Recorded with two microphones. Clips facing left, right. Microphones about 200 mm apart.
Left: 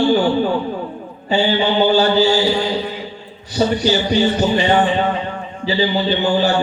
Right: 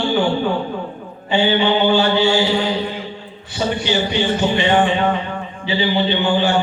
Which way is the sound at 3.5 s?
40° left (ahead or behind).